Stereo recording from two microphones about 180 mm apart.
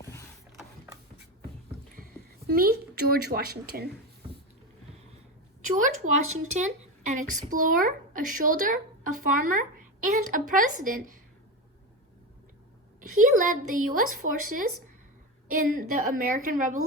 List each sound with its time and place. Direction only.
2.5 s a woman's voice: 55° right (ahead or behind)
5.6 s a woman's voice: 45° right (ahead or behind)
13.0 s a woman's voice: 45° right (ahead or behind)